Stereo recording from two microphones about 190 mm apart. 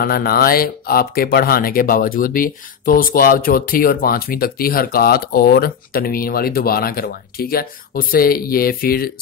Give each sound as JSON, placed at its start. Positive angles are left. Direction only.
{"t": 0.0, "sound": "speech", "side_deg": 50}